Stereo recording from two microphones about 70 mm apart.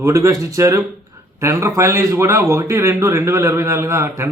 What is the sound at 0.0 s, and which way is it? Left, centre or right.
A man's voice, right.